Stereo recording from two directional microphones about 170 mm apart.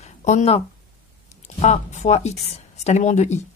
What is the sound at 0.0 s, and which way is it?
A woman's voice, 45° left (ahead or behind).